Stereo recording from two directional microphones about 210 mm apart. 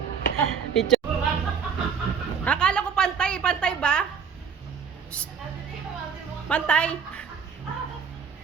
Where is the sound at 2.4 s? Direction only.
5° left (ahead or behind).